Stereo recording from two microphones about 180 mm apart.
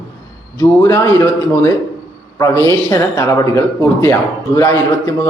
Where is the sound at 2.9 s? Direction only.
15° left (ahead or behind).